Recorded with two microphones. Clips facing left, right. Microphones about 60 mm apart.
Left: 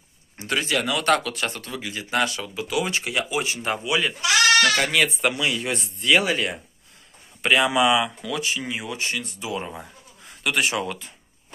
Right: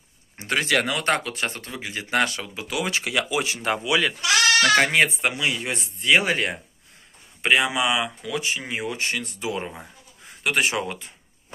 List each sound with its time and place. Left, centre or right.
0.4 s speech: right
0.9 s speech: right
2.0 s speech: right
2.8 s speech: right
4.6 s speech: right
4.9 s speech: right
6.2 s speech: right
7.4 s speech: centre
8.2 s speech: centre
8.5 s speech: right
8.9 s speech: right
10.4 s speech: right